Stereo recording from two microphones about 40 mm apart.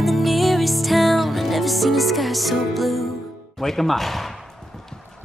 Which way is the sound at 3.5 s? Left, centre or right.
Centre.